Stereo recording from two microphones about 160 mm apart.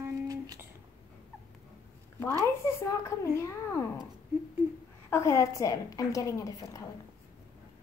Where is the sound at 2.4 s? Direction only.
15° left (ahead or behind).